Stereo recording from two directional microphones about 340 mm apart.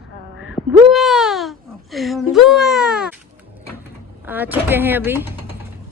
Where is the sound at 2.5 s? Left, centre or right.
Centre.